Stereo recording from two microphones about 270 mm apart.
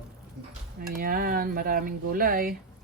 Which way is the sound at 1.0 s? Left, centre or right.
Right.